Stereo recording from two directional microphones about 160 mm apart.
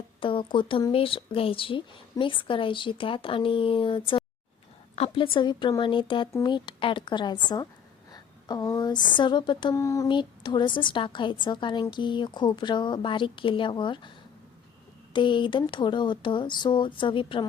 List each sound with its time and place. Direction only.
0.2 s speech: 30° left (ahead or behind)
6.3 s a sound: 30° left (ahead or behind)
15.1 s speech: 30° left (ahead or behind)